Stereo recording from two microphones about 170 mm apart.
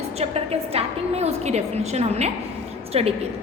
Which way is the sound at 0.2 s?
35° right (ahead or behind).